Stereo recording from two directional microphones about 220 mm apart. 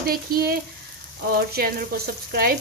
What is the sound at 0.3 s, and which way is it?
Speech, 40° right (ahead or behind).